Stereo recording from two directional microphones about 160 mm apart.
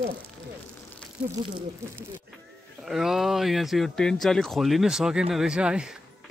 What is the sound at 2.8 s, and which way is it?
Speech, centre (ahead or behind).